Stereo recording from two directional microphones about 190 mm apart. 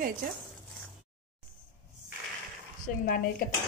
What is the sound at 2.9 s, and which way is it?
Speech, 45° left (ahead or behind).